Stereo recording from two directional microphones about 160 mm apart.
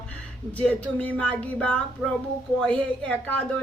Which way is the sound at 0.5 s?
10° left (ahead or behind).